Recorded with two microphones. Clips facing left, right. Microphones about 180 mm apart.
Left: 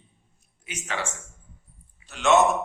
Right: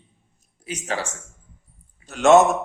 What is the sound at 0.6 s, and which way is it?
A man's voice, 35° right (ahead or behind).